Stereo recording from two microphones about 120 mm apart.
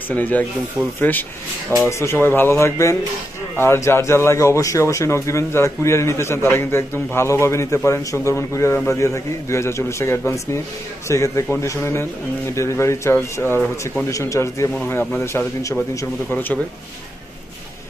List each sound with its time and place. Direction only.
0.1 s a man's voice: 15° left (ahead or behind)